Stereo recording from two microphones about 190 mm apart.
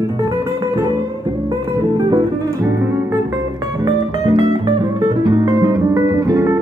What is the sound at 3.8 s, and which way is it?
Music, 25° right (ahead or behind).